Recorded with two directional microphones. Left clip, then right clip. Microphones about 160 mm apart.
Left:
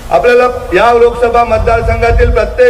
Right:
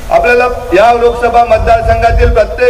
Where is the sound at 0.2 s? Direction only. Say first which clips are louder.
Left 1 dB; 35° right (ahead or behind).